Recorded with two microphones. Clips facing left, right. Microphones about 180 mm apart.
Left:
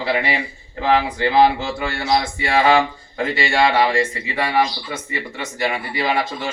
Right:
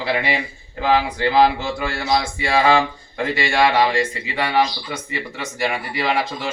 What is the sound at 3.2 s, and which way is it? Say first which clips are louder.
Speech: even; 10° left (ahead or behind).